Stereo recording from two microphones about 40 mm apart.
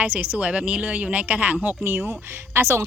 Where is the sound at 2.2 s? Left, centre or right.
Right.